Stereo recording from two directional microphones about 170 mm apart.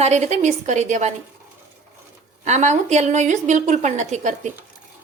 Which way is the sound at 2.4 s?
45° right (ahead or behind).